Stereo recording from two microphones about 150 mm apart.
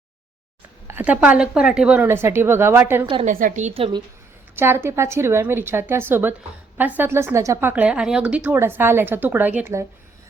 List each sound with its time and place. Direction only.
0.9 s speech: 10° right (ahead or behind)
3.2 s a woman's voice: 60° right (ahead or behind)
3.8 s speech: 35° right (ahead or behind)
4.5 s speech: 15° right (ahead or behind)